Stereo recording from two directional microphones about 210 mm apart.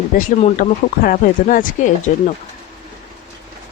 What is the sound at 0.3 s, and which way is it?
Speech, 40° left (ahead or behind).